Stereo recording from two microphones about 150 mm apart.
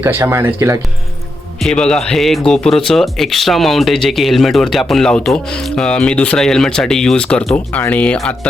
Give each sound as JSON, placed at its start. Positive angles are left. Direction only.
{"t": 0.0, "sound": "speech", "side_deg": -15}
{"t": 1.5, "sound": "speech", "side_deg": 5}